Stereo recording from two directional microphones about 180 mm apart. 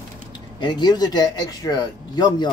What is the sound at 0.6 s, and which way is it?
Speech, 25° left (ahead or behind).